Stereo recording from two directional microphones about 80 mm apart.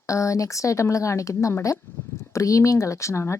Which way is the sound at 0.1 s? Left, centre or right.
Left.